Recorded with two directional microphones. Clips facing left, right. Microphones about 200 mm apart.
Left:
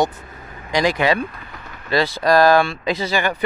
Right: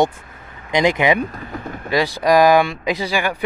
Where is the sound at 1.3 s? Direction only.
45° right (ahead or behind).